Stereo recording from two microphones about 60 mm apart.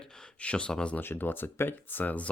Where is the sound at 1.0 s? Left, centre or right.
Left.